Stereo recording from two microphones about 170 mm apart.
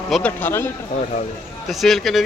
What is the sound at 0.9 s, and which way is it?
Speech, 40° left (ahead or behind).